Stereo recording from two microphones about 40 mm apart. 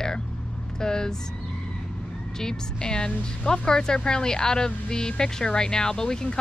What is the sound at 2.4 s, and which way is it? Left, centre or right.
Speech, centre.